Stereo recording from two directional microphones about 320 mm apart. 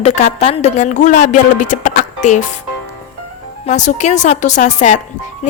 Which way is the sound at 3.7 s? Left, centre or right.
Left.